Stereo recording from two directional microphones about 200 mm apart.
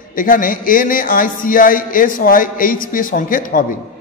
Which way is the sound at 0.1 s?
45° left (ahead or behind).